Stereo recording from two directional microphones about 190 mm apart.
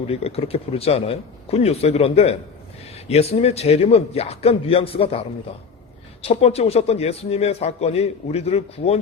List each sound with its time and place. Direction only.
0.1 s a man's voice: 30° left (ahead or behind)
6.2 s a man's voice: 30° left (ahead or behind)